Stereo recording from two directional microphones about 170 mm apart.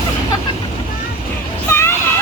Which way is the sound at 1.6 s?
15° left (ahead or behind).